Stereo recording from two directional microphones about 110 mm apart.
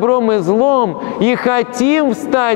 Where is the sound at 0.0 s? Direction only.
25° left (ahead or behind).